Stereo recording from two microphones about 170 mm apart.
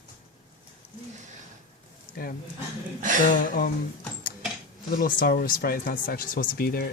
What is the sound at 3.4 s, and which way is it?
Speech, 55° left (ahead or behind).